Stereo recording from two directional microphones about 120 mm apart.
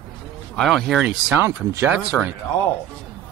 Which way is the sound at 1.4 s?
25° right (ahead or behind).